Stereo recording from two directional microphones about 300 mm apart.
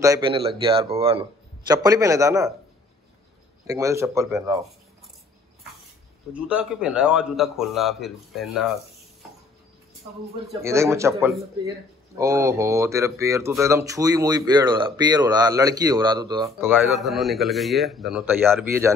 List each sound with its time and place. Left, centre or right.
0.0 s speech: centre
3.6 s speech: centre
6.3 s a man's voice: centre
10.6 s speech: centre